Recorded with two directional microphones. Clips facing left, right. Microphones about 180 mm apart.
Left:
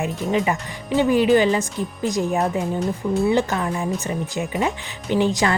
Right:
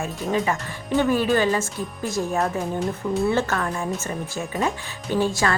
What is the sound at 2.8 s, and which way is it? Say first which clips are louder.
Speech: left 1 dB; centre (ahead or behind).